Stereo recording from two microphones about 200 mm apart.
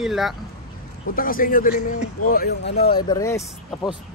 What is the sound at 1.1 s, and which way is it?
Speech, 45° left (ahead or behind).